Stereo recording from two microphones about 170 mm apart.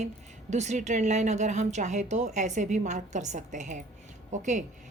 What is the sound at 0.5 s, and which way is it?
Speech, 45° right (ahead or behind).